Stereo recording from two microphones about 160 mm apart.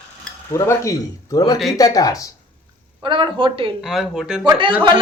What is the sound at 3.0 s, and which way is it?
Speech, 30° right (ahead or behind).